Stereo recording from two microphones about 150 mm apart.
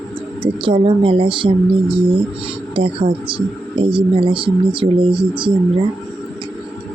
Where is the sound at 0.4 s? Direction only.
35° right (ahead or behind).